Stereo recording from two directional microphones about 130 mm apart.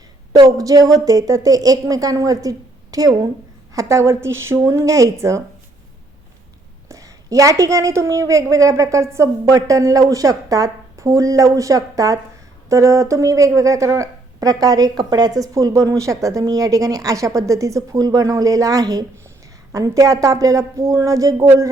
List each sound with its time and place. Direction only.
0.3 s speech: 25° right (ahead or behind)
6.8 s a woman's voice: 25° right (ahead or behind)